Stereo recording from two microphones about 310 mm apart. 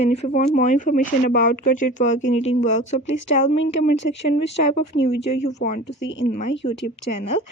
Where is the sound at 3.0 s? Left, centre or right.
Left.